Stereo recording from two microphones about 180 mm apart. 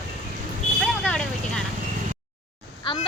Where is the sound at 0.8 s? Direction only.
5° left (ahead or behind).